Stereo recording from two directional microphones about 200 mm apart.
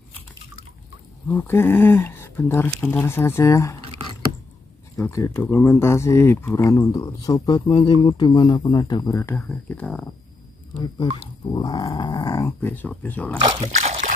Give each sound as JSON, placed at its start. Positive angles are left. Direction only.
{"t": 1.3, "sound": "speech", "side_deg": 10}
{"t": 4.9, "sound": "speech", "side_deg": 15}
{"t": 11.5, "sound": "speech", "side_deg": 20}
{"t": 13.4, "sound": "speech", "side_deg": -20}
{"t": 13.7, "sound": "trickle", "side_deg": -35}